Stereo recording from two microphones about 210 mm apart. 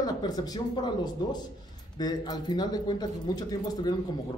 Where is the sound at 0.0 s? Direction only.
20° left (ahead or behind).